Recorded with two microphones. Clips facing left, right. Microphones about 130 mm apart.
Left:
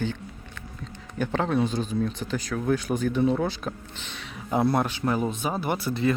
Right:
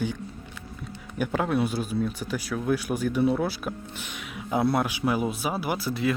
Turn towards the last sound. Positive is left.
turn(degrees=-5)  # may be behind; listen again after turning